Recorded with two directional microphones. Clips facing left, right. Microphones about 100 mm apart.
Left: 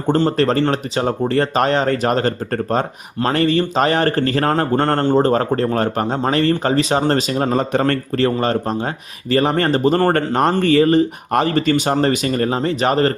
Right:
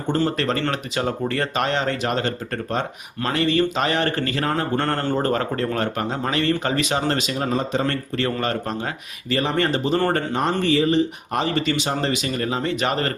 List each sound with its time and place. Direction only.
0.2 s speech: 35° left (ahead or behind)
5.0 s speech: 30° left (ahead or behind)
7.7 s a man's voice: 60° left (ahead or behind)
8.1 s speech: 35° left (ahead or behind)